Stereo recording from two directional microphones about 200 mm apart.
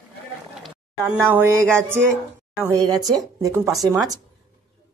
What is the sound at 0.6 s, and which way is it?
Speech, 5° right (ahead or behind).